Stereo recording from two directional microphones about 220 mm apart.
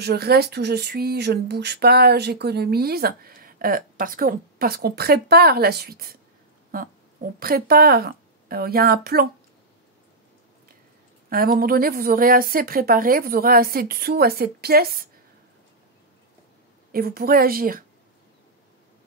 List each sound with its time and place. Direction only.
0.0 s speech: 45° right (ahead or behind)
11.2 s a woman's voice: 40° right (ahead or behind)
16.9 s a woman's voice: 45° right (ahead or behind)